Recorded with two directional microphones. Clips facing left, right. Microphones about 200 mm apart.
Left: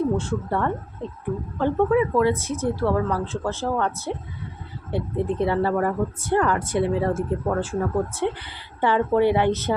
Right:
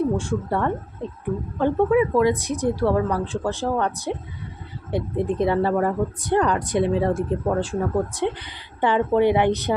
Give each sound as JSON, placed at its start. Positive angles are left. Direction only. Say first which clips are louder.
{"t": 0.0, "sound": "speech", "louder": "right 1 dB", "side_deg": -15}
{"t": 1.0, "sound": "a sound", "louder": "right 1 dB", "side_deg": -15}
{"t": 1.5, "sound": "speech", "louder": "right 1 dB", "side_deg": -15}